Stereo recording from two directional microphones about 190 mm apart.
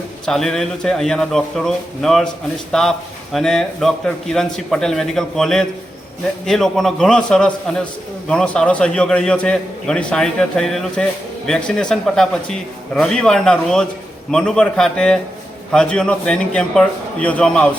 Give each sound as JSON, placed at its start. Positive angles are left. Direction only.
{"t": 0.3, "sound": "a man's voice", "side_deg": 0}